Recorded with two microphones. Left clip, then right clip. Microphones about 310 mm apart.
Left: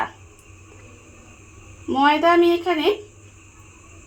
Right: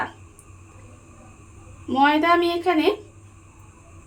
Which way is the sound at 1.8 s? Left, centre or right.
Left.